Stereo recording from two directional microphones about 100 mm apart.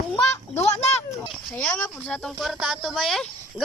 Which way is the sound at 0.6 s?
90° left.